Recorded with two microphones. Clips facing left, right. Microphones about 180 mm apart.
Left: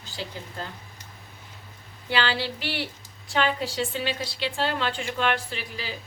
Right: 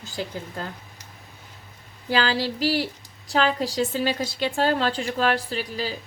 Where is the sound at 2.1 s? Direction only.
40° right (ahead or behind).